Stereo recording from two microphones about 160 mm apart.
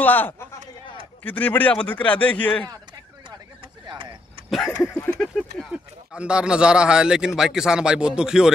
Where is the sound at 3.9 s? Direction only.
30° right (ahead or behind).